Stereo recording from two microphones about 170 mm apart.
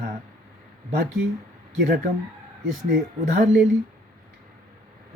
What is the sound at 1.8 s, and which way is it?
Speech, 65° right (ahead or behind).